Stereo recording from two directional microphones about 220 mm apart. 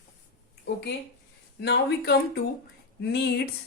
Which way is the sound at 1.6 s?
50° left (ahead or behind).